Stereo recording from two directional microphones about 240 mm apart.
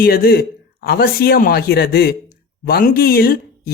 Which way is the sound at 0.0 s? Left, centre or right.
Left.